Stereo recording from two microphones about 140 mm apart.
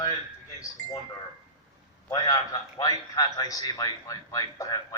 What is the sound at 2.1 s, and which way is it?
A man's voice, 25° left (ahead or behind).